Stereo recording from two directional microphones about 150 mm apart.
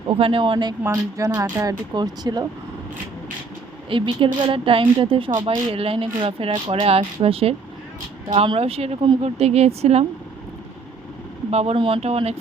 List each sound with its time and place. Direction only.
0.1 s speech: 35° right (ahead or behind)
3.8 s speech: 35° right (ahead or behind)
11.5 s speech: 40° right (ahead or behind)